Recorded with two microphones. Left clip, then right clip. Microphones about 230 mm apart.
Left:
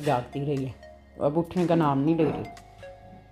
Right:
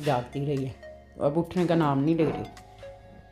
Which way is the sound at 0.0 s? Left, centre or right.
Centre.